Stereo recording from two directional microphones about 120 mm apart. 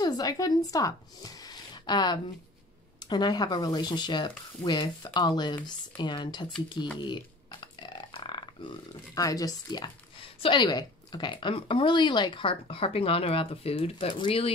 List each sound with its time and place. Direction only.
0.0 s speech: 30° left (ahead or behind)
7.6 s a sound: 40° left (ahead or behind)
10.2 s a woman's voice: 45° left (ahead or behind)